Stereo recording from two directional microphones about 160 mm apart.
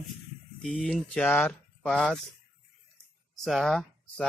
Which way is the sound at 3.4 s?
Centre (ahead or behind).